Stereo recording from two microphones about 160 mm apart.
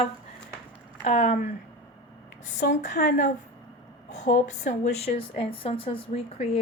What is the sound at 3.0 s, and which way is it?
Speech, 65° left (ahead or behind).